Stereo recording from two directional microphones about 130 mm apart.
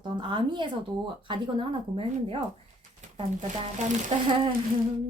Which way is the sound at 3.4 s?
70° right (ahead or behind).